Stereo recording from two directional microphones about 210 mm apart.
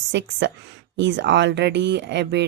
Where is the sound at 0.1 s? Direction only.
55° right (ahead or behind).